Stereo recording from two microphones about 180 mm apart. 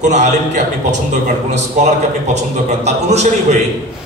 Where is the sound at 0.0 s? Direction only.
40° right (ahead or behind).